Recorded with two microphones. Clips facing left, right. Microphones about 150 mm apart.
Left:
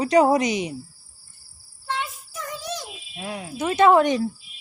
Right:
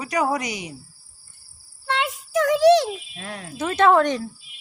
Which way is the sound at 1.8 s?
80° right.